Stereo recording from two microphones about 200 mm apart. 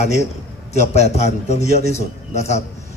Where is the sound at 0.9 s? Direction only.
35° left (ahead or behind).